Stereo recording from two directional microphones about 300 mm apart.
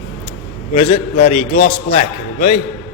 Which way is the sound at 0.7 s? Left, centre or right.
Left.